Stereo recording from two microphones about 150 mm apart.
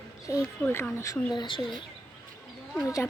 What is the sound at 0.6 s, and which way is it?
Speech, 15° left (ahead or behind).